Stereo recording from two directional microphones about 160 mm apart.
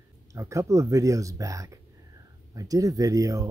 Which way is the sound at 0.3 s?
20° right (ahead or behind).